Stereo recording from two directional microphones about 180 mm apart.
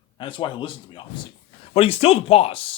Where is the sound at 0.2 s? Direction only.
25° left (ahead or behind).